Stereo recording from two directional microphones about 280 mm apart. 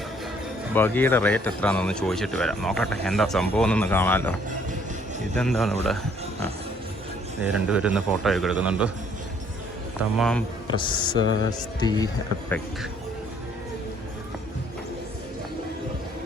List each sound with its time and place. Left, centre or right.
0.7 s speech: centre
7.4 s speech: centre
10.0 s speech: centre
10.7 s speech: centre